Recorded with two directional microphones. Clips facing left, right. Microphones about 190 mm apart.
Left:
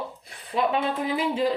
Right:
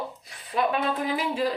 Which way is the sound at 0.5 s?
25° left (ahead or behind).